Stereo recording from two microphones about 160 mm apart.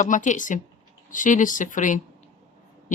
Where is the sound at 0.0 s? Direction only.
50° left (ahead or behind).